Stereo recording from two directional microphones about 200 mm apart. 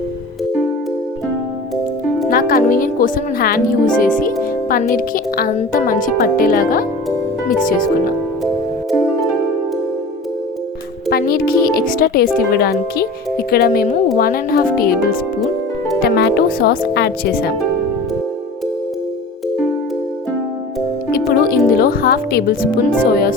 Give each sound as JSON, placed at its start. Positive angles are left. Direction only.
{"t": 2.3, "sound": "speech", "side_deg": 45}
{"t": 11.1, "sound": "music", "side_deg": 50}
{"t": 11.9, "sound": "speech", "side_deg": 45}
{"t": 21.1, "sound": "speech", "side_deg": 45}